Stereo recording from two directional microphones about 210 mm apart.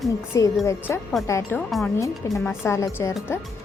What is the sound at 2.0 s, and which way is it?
A woman's voice, 15° left (ahead or behind).